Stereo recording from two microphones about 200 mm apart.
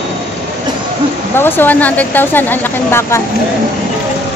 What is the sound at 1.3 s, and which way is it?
A woman's voice, 10° left (ahead or behind).